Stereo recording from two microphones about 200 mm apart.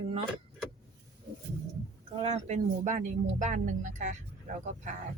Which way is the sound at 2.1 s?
30° right (ahead or behind).